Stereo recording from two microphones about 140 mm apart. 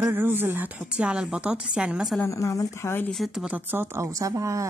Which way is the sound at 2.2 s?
20° left (ahead or behind).